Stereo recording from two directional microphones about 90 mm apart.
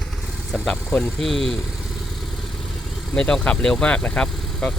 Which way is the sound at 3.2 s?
10° left (ahead or behind).